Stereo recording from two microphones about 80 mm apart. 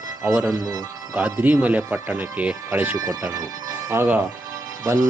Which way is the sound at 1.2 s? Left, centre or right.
Centre.